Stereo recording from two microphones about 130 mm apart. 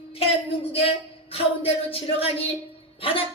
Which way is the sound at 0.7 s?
50° left (ahead or behind).